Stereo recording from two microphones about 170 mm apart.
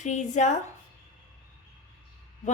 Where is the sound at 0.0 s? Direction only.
45° left (ahead or behind).